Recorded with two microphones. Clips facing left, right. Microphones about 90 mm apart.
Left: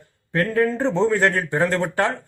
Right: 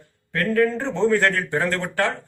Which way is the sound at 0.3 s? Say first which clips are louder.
Even; 20° left (ahead or behind).